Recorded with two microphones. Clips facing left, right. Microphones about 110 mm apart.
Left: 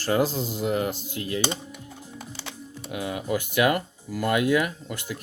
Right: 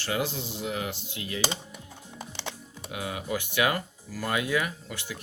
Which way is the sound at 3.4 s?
45° left (ahead or behind).